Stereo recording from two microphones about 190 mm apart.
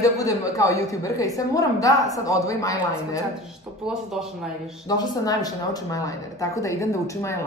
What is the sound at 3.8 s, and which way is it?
Speech, centre (ahead or behind).